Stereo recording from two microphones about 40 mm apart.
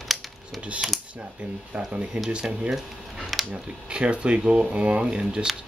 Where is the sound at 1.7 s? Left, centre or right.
Right.